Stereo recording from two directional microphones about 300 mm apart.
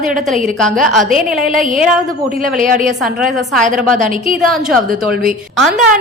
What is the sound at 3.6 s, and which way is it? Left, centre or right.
Speech, right.